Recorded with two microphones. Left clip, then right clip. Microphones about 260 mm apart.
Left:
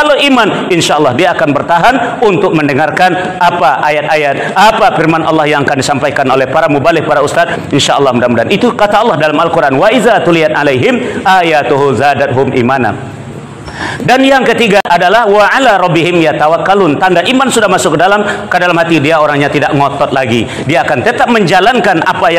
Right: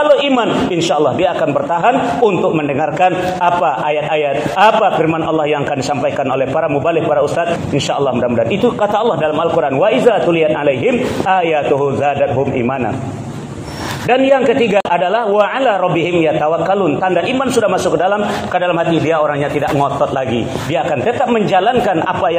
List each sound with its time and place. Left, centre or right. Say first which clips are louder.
0.0 s a man's voice: left 4 dB; left
14.0 s a man's voice: left 4 dB; left
20.7 s a man's voice: left 6 dB; left